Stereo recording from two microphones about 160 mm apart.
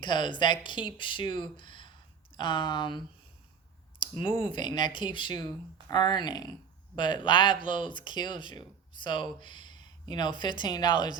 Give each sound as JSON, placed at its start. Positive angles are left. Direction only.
{"t": 0.0, "sound": "speech", "side_deg": 30}
{"t": 4.4, "sound": "speech", "side_deg": 30}